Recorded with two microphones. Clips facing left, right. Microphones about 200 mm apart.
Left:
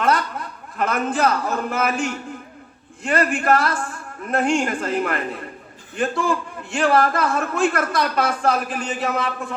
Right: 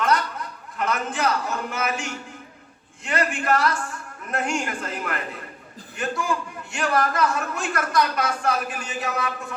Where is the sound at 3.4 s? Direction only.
55° left (ahead or behind).